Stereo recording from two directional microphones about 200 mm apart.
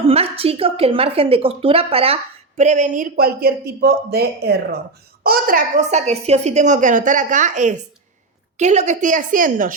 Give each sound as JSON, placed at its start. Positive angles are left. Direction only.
{"t": 0.0, "sound": "a woman's voice", "side_deg": -30}